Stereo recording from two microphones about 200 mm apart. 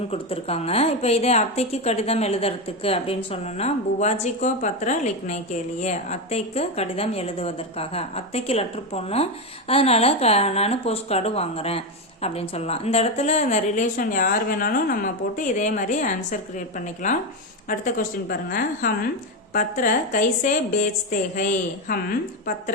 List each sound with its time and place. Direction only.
0.1 s a woman's voice: 30° left (ahead or behind)